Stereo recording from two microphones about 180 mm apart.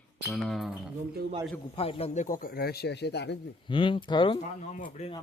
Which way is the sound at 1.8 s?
35° left (ahead or behind).